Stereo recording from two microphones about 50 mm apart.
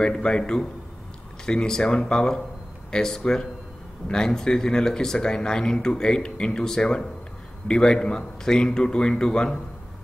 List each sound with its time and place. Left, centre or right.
0.0 s speech: centre